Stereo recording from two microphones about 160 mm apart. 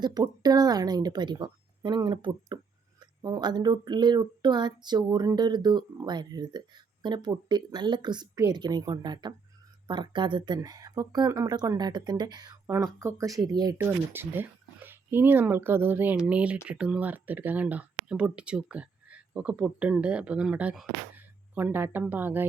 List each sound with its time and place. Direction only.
0.0 s speech: 25° right (ahead or behind)
13.7 s speech: 15° right (ahead or behind)